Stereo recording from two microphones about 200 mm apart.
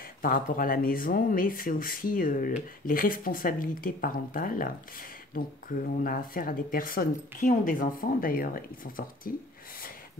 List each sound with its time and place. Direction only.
0.2 s speech: 45° left (ahead or behind)